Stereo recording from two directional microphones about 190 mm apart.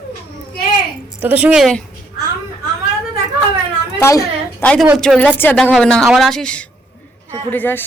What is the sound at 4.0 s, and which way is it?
A woman's voice, 15° left (ahead or behind).